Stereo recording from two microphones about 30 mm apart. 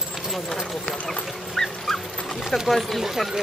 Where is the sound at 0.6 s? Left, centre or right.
Centre.